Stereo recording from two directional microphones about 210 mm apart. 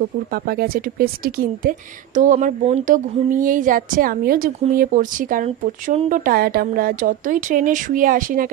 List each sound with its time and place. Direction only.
0.3 s speech: 45° right (ahead or behind)